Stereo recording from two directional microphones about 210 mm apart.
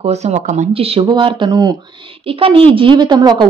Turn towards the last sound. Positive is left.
turn(degrees=-20)  # may be behind; listen again after turning